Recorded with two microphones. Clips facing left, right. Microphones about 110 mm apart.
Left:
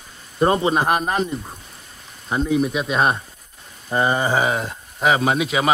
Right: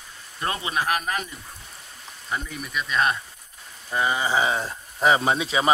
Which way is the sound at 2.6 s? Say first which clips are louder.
Left 5 dB; 50° left (ahead or behind).